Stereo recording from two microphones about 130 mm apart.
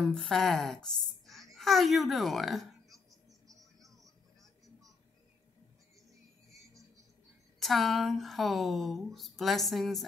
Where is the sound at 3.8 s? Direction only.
25° right (ahead or behind).